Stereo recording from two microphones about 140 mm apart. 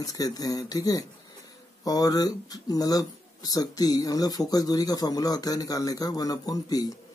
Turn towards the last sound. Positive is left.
turn(degrees=25)  # may be behind; listen again after turning